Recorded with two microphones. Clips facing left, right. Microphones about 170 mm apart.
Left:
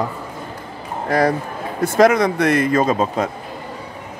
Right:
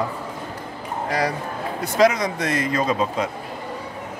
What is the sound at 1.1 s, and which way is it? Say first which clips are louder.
A man's voice: left 7 dB; 50° left (ahead or behind).